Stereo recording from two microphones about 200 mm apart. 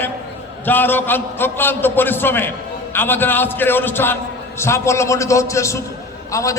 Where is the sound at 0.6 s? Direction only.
10° left (ahead or behind).